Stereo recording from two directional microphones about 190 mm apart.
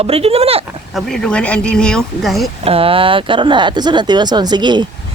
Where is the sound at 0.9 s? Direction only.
5° left (ahead or behind).